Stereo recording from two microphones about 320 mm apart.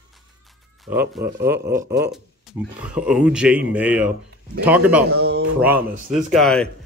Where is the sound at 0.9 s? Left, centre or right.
Centre.